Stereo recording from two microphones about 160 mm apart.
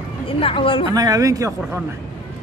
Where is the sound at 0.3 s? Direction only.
35° left (ahead or behind).